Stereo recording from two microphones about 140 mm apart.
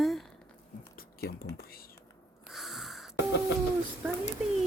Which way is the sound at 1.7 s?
90° left.